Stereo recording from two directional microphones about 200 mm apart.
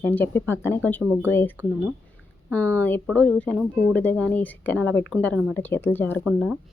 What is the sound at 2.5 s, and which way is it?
A woman's voice, 10° left (ahead or behind).